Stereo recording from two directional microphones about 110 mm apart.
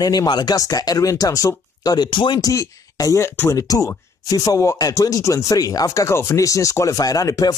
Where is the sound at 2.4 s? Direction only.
30° left (ahead or behind).